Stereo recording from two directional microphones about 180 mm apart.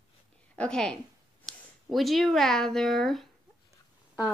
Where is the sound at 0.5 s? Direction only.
5° left (ahead or behind).